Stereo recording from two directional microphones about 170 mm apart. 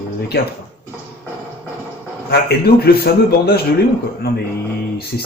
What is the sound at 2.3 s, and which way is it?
Speech, 70° left (ahead or behind).